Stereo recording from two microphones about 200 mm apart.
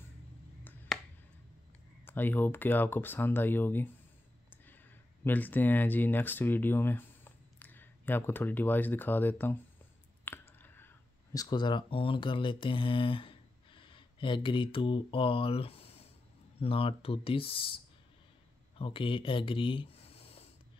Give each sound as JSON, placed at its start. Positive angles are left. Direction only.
{"t": 2.0, "sound": "speech", "side_deg": 10}
{"t": 10.2, "sound": "squish", "side_deg": 10}
{"t": 11.3, "sound": "speech", "side_deg": 20}
{"t": 18.8, "sound": "speech", "side_deg": 25}